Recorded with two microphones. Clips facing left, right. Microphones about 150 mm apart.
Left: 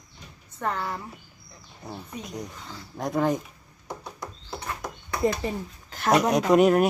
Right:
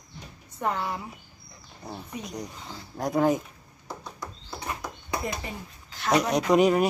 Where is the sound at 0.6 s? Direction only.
10° right (ahead or behind).